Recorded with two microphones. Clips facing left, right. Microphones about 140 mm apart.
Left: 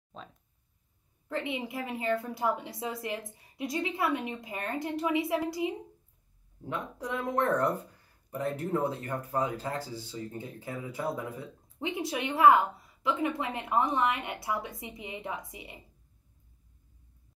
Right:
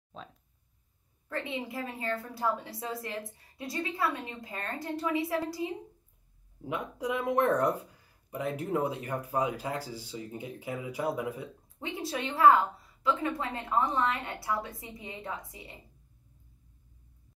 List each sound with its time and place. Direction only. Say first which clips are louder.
1.3 s a woman's voice: left 2 dB; 20° left (ahead or behind)
6.6 s speech: right 2 dB; 10° right (ahead or behind)
11.8 s a woman's voice: left 2 dB; 15° left (ahead or behind)